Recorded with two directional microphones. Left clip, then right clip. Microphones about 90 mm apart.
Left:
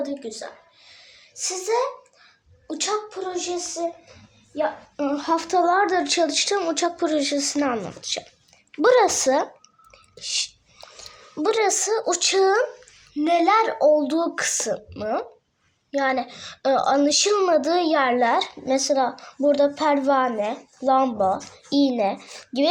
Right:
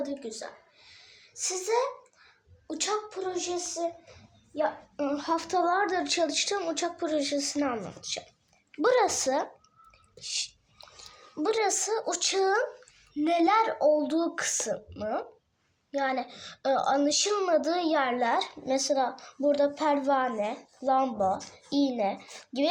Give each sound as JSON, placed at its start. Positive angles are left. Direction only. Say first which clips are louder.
{"t": 0.0, "sound": "a woman's voice", "louder": "left 5 dB", "side_deg": 0}
{"t": 5.1, "sound": "a child's voice", "louder": "left 7 dB", "side_deg": 30}
{"t": 9.9, "sound": "chewing", "louder": "left 7 dB", "side_deg": 45}
{"t": 13.1, "sound": "a child's voice", "louder": "left 6 dB", "side_deg": 45}